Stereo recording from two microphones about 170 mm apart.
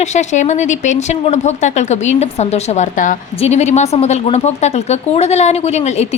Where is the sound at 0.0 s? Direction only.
45° left (ahead or behind).